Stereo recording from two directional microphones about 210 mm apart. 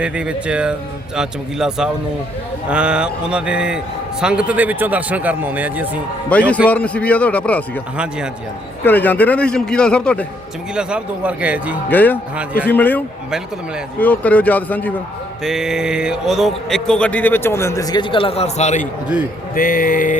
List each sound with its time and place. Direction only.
0.0 s a man's voice: 5° right (ahead or behind)
6.3 s a man's voice: 5° left (ahead or behind)
7.9 s speech: 5° right (ahead or behind)
8.8 s a man's voice: 10° left (ahead or behind); by 11.8 s 5° right (ahead or behind)
11.9 s a man's voice: 10° left (ahead or behind)
14.0 s a man's voice: 5° left (ahead or behind)
15.4 s a man's voice: 5° right (ahead or behind); by 18.9 s 35° left (ahead or behind)
19.5 s a sound: 40° left (ahead or behind)